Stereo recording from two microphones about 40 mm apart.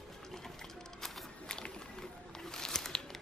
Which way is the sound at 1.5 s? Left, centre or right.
Centre.